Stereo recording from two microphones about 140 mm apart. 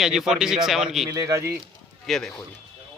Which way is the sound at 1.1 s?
20° right (ahead or behind).